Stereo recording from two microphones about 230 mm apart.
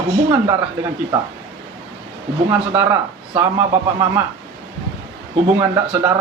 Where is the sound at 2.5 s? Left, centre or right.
Centre.